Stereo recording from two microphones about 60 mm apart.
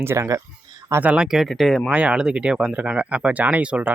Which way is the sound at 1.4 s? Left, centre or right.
Centre.